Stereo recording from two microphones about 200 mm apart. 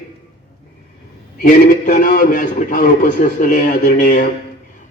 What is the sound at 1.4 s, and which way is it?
A man's voice, 40° left (ahead or behind).